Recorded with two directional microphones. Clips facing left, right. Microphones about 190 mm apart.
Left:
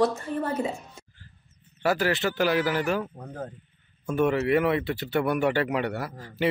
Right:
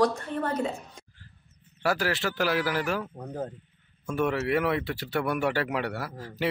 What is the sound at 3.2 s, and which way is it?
Speech, 20° right (ahead or behind).